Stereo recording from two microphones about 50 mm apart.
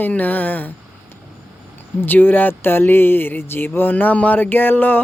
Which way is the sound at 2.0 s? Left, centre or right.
Left.